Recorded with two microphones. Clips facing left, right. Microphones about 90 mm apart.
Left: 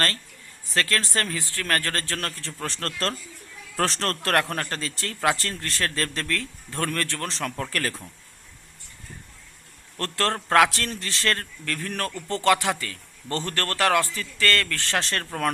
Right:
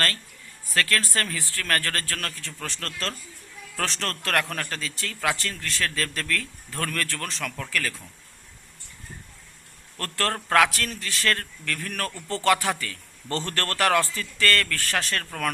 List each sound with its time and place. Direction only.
0.7 s a man's voice: 25° left (ahead or behind); by 7.9 s 40° left (ahead or behind)
10.0 s a man's voice: 25° left (ahead or behind)